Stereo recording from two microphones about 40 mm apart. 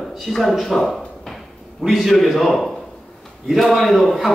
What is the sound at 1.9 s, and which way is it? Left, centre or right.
A man's voice, centre.